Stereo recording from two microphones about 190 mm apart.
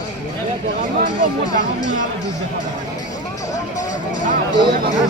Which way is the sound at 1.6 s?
40° left (ahead or behind).